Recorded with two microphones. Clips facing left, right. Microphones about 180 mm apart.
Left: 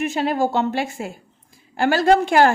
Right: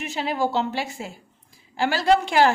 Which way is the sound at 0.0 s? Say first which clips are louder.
Left 5 dB; 50° left (ahead or behind).